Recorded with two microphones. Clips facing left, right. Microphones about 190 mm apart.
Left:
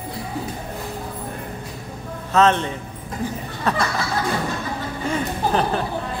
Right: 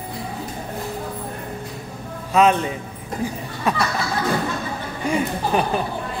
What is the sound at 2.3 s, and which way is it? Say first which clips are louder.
Speech: right 1 dB; 10° right (ahead or behind).